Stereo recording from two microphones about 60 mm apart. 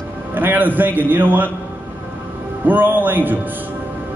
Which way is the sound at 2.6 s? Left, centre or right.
Right.